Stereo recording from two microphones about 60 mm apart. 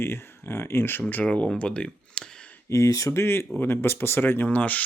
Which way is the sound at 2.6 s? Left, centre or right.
Left.